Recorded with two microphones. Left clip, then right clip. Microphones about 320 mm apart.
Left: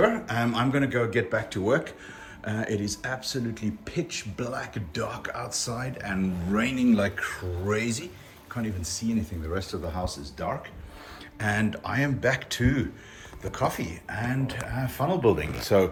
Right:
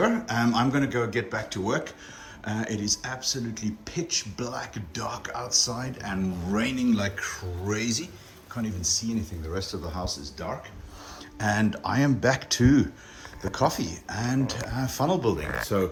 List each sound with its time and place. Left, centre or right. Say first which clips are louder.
0.0 s speech: left 1 dB; centre
11.3 s speech: right 1 dB; centre